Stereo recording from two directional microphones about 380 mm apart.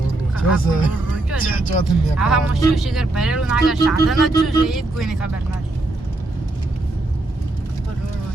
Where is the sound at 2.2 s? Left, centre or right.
Centre.